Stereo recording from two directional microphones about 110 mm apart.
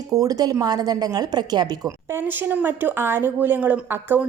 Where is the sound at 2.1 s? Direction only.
20° right (ahead or behind).